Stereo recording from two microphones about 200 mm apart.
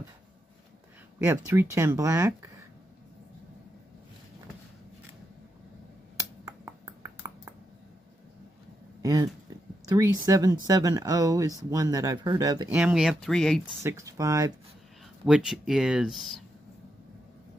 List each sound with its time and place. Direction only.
1.2 s speech: 10° right (ahead or behind)
6.4 s a sound: 15° right (ahead or behind)
9.0 s speech: 15° right (ahead or behind); by 13.7 s centre (ahead or behind)
13.8 s speech: 15° right (ahead or behind)
15.2 s speech: 5° right (ahead or behind)